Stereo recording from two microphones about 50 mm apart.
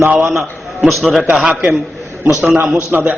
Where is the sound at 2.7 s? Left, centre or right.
Right.